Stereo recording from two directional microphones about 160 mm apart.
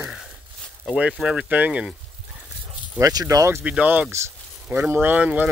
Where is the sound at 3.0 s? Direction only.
20° right (ahead or behind).